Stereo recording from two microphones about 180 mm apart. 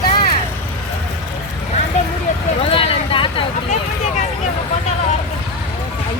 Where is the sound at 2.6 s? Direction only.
30° left (ahead or behind).